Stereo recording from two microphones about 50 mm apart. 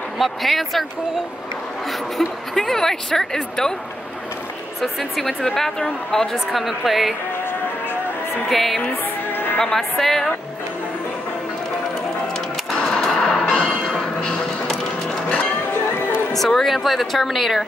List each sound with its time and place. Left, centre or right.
0.2 s speech: centre
1.9 s a woman's voice: centre
4.8 s a woman's voice: centre
6.3 s speech: centre
8.5 s speech: centre
8.8 s music: left
9.8 s speech: centre
12.8 s music: centre
13.9 s music: centre
16.3 s speech: centre